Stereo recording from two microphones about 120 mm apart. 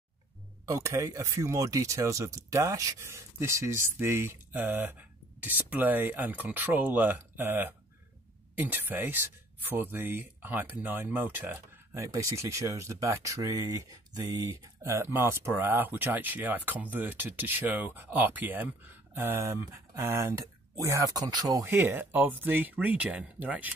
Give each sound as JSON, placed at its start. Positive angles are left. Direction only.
{"t": 0.7, "sound": "speech", "side_deg": -25}
{"t": 21.6, "sound": "speech", "side_deg": -20}